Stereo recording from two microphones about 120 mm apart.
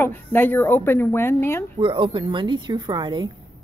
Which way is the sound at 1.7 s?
45° right (ahead or behind).